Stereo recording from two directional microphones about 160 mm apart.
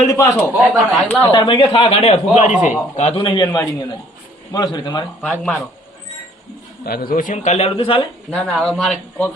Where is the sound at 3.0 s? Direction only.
35° left (ahead or behind).